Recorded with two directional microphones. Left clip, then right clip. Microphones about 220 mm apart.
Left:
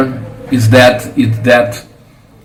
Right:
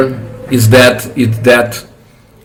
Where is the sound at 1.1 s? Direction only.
55° right (ahead or behind).